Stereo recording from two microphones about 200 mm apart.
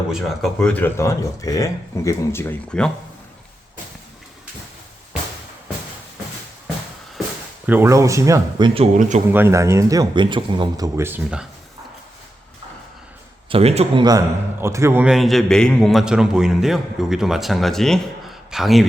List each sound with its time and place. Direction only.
0.1 s speech: centre (ahead or behind)
7.7 s speech: 15° right (ahead or behind); by 9.2 s 35° right (ahead or behind)
9.3 s speech: 10° right (ahead or behind)
13.5 s a man's voice: 30° right (ahead or behind); by 18.9 s centre (ahead or behind)